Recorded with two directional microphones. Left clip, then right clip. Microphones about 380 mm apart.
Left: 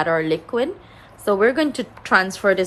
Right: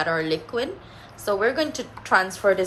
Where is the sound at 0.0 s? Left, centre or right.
Centre.